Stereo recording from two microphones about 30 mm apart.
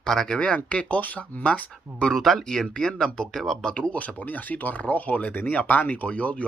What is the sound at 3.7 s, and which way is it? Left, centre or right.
Speech, left.